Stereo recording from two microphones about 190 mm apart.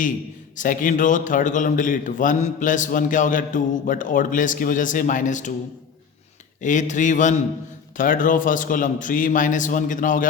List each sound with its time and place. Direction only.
0.5 s a man's voice: 45° left (ahead or behind)
6.6 s a man's voice: 40° left (ahead or behind)